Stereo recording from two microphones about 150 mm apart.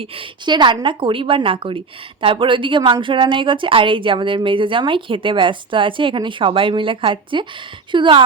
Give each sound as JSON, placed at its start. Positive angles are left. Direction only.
{"t": 0.0, "sound": "speech", "side_deg": -35}